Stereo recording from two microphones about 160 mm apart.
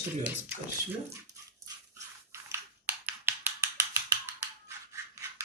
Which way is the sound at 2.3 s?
15° right (ahead or behind).